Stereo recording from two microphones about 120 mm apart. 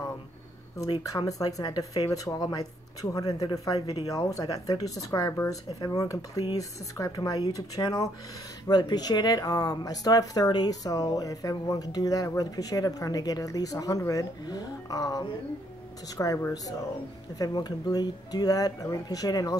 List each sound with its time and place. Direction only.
0.7 s speech: 30° left (ahead or behind)